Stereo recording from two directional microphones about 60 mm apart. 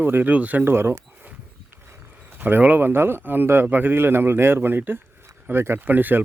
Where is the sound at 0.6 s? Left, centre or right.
Right.